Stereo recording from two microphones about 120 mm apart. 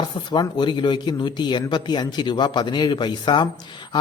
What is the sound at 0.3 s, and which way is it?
A man's voice, 40° left (ahead or behind).